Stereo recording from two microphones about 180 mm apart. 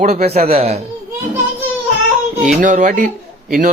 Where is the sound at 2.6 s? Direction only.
45° right (ahead or behind).